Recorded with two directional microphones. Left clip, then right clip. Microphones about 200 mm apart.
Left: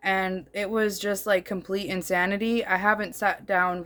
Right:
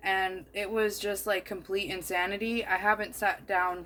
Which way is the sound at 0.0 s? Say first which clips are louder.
Left 3 dB; 50° left (ahead or behind).